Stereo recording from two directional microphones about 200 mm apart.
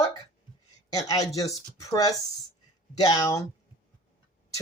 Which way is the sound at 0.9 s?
20° left (ahead or behind).